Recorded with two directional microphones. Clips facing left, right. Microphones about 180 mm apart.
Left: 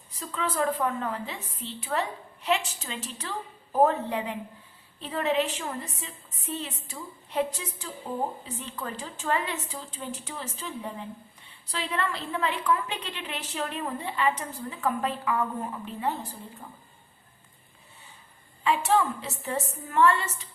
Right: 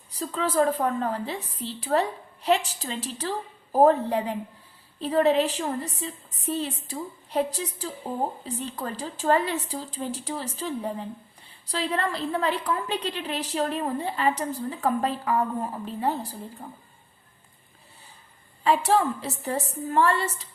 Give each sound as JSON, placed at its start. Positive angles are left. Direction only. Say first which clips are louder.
{"t": 0.1, "sound": "a woman's voice", "louder": "right 5 dB", "side_deg": -35}
{"t": 18.6, "sound": "a woman's voice", "louder": "right 2 dB", "side_deg": -35}